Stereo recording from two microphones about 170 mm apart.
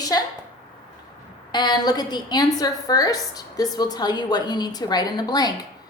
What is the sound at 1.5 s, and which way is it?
A woman's voice, 25° left (ahead or behind).